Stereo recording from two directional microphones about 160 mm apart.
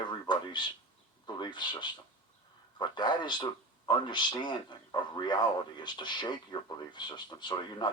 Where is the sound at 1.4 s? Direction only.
30° left (ahead or behind).